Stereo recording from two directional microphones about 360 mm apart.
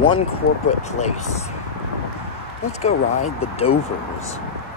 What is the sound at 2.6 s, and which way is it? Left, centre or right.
Speech, centre.